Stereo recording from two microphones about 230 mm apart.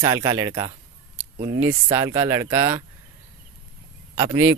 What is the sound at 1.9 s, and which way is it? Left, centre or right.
Speech, centre.